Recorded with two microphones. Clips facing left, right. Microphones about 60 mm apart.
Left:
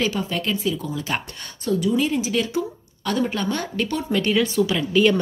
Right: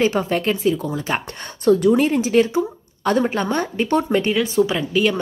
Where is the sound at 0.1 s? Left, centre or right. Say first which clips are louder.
Right 5 dB; right.